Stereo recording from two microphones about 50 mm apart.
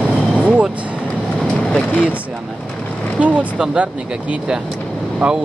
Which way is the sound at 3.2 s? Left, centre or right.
Right.